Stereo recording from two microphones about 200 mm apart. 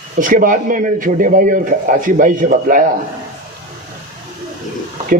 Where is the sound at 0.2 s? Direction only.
40° right (ahead or behind).